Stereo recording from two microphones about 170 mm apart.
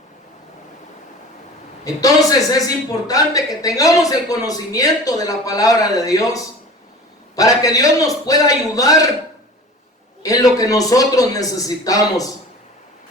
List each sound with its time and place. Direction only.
1.8 s a man's voice: 20° left (ahead or behind)
10.2 s a man's voice: 20° left (ahead or behind)